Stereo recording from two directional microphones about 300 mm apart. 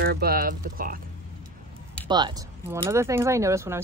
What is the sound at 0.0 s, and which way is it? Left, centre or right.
Speech, right.